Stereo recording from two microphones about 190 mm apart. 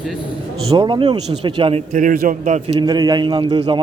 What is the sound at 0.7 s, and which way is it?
A man's voice, 25° right (ahead or behind).